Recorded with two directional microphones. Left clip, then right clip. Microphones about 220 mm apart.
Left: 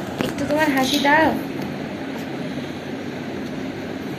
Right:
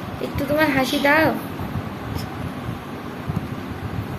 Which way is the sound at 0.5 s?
30° right (ahead or behind).